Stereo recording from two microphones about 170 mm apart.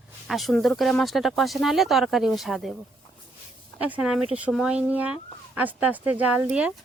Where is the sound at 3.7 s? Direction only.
10° right (ahead or behind).